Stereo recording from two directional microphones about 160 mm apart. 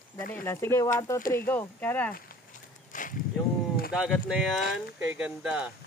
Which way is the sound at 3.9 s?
5° right (ahead or behind).